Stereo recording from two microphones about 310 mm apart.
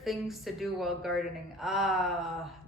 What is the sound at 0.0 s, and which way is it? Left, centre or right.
A woman's voice, centre.